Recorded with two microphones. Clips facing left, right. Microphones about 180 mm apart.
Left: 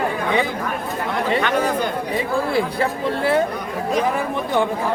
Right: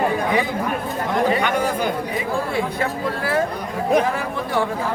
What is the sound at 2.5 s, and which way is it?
Speech, 35° left (ahead or behind).